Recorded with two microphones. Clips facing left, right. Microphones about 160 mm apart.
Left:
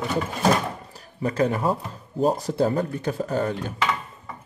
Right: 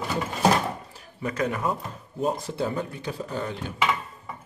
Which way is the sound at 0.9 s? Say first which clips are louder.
Left 5 dB; 35° left (ahead or behind).